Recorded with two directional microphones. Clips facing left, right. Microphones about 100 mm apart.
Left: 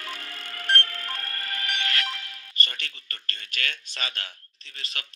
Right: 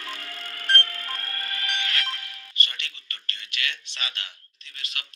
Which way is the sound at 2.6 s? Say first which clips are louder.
Left 1 dB; 40° left (ahead or behind).